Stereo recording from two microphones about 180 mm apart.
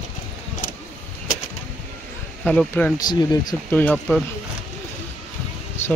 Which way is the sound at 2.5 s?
5° left (ahead or behind).